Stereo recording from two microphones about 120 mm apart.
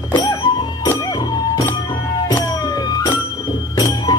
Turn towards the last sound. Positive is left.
turn(degrees=35)  # may be behind; listen again after turning